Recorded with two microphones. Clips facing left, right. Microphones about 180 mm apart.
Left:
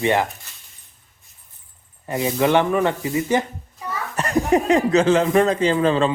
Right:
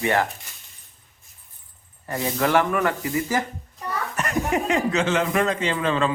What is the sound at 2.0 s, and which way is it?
Speech, 20° left (ahead or behind).